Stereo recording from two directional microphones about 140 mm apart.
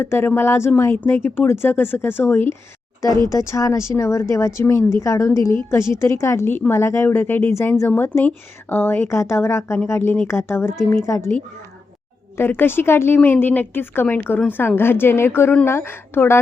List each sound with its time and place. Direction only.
0.0 s speech: 15° left (ahead or behind)